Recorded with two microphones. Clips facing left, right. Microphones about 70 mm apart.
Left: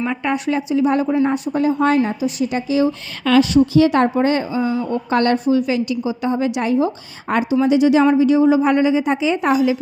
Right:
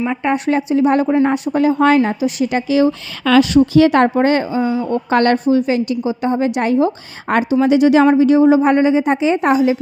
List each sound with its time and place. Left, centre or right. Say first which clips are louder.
0.3 s a woman's voice: right 3 dB; right
1.3 s a woman's voice: right 3 dB; right
2.0 s speech: right 3 dB; right
5.5 s a woman's voice: right 2 dB; right